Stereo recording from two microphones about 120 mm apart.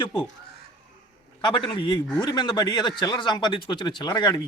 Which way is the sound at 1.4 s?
40° left (ahead or behind).